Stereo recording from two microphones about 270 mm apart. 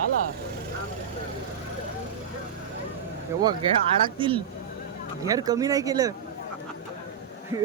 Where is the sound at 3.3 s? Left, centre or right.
Centre.